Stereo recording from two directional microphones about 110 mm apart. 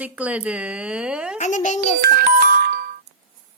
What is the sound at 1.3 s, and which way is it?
Speech, 90° left.